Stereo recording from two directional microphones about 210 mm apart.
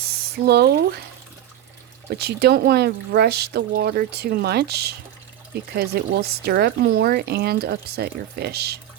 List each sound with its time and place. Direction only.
0.4 s speech: 50° right (ahead or behind)
2.0 s speech: 50° right (ahead or behind)